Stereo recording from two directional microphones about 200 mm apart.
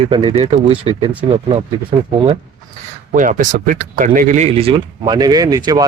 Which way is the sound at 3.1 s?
40° right (ahead or behind).